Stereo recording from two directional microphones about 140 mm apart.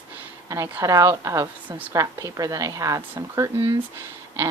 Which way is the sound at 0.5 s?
25° right (ahead or behind).